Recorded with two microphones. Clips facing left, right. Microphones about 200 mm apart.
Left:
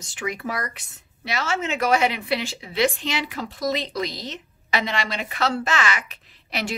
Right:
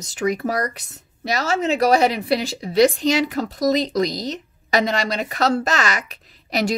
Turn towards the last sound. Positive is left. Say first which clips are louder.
# right 7 dB
turn(degrees=-40)  # may be behind; listen again after turning